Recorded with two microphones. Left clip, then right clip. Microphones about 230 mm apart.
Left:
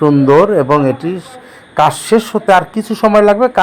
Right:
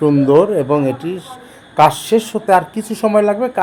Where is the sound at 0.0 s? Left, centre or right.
Centre.